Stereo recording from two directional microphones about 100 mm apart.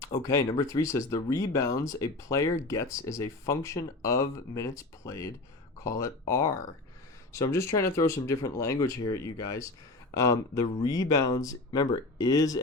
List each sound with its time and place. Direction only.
0.2 s speech: 35° left (ahead or behind)